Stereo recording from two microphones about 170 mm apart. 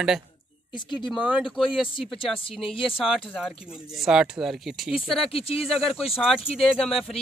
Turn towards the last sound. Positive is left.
turn(degrees=0)  # may be behind; listen again after turning